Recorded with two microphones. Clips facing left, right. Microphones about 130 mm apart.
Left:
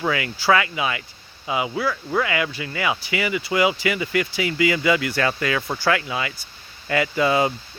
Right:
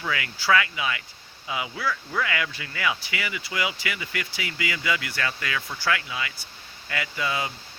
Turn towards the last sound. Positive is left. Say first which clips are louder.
# left 10 dB
turn(degrees=35)  # may be behind; listen again after turning